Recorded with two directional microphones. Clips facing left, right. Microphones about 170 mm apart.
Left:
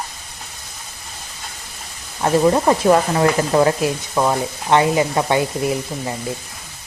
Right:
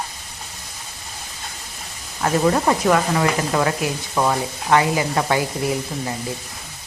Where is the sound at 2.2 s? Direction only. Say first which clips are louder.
Left 3 dB; 25° left (ahead or behind).